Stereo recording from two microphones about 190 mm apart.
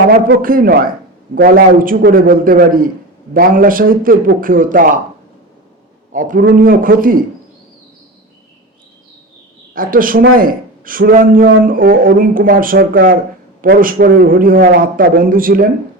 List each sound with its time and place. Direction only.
0.4 s speech: 50° right (ahead or behind)
6.1 s speech: 45° right (ahead or behind)
9.7 s speech: 50° right (ahead or behind)